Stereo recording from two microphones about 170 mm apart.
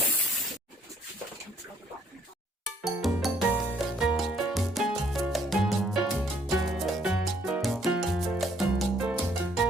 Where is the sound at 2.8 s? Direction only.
Centre (ahead or behind).